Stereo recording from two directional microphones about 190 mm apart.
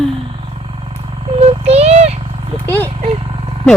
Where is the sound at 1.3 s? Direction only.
30° right (ahead or behind).